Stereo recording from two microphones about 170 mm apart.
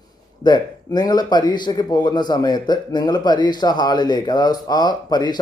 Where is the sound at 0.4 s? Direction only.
25° left (ahead or behind).